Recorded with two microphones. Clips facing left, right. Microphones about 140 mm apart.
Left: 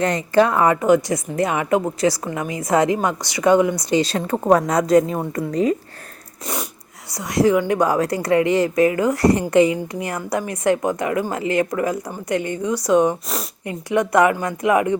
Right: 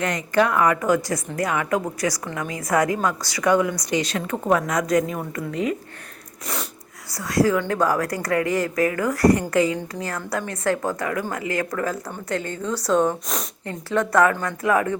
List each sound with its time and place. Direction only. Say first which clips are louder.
0.0 s a woman's voice: left 4 dB; 30° left (ahead or behind)
7.1 s a woman's voice: left 3 dB; 20° left (ahead or behind)